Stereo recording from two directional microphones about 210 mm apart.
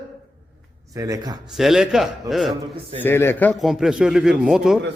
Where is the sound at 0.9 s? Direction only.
15° right (ahead or behind).